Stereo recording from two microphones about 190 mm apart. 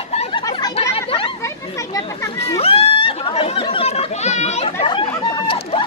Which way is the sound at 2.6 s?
30° left (ahead or behind).